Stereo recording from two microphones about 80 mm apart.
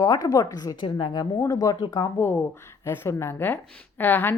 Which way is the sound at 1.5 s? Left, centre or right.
Left.